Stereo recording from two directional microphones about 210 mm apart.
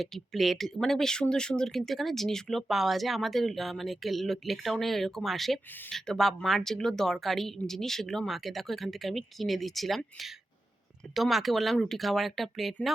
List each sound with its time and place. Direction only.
0.0 s speech: centre (ahead or behind)